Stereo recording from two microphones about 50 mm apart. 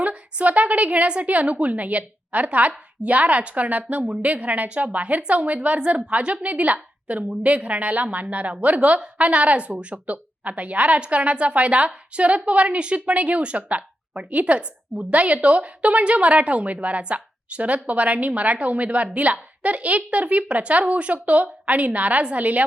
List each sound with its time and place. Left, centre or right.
0.0 s a woman's voice: right